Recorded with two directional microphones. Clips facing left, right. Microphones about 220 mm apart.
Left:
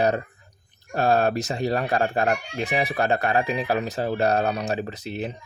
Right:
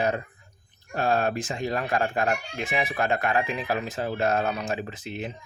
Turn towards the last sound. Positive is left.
turn(degrees=35)  # may be behind; listen again after turning